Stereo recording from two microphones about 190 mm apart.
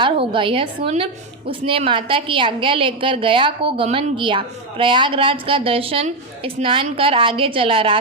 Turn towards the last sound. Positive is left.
turn(degrees=-30)  # may be behind; listen again after turning